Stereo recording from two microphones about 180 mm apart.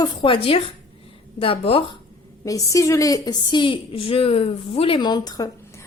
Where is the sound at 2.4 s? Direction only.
20° left (ahead or behind).